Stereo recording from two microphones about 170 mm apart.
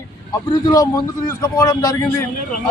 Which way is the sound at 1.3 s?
15° left (ahead or behind).